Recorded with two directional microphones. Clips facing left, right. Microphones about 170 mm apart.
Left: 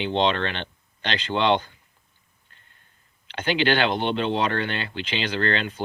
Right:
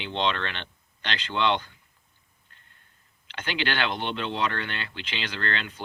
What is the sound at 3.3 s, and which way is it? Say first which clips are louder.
Speech: left 8 dB; 25° left (ahead or behind).